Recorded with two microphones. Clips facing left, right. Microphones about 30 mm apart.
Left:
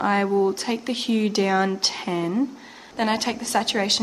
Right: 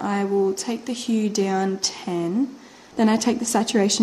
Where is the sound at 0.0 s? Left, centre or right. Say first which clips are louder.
Left 1 dB; left.